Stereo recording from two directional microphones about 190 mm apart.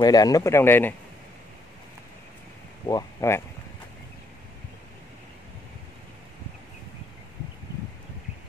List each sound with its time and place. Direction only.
0.0 s speech: 20° left (ahead or behind)
2.9 s speech: 20° left (ahead or behind)